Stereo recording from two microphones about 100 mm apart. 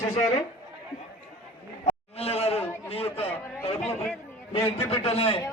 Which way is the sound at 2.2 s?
90° left.